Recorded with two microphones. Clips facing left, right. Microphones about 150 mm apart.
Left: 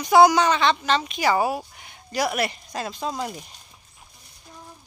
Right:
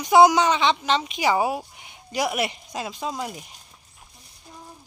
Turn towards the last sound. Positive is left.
turn(degrees=-5)  # may be behind; listen again after turning